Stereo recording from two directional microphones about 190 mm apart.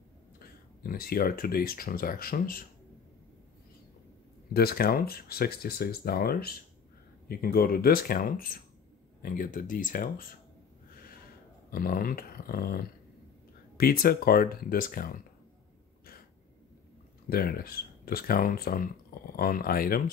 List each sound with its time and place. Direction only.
0.4 s speech: 50° left (ahead or behind)
4.6 s speech: 55° left (ahead or behind)
11.7 s speech: 50° left (ahead or behind)
17.3 s speech: 50° left (ahead or behind)